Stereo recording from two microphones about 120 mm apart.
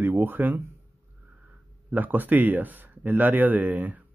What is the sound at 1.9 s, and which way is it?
Speech, 15° right (ahead or behind).